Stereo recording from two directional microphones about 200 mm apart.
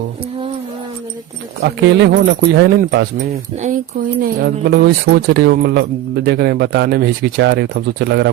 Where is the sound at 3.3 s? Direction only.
35° right (ahead or behind).